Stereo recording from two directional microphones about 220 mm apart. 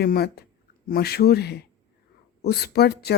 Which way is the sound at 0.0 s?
45° left (ahead or behind).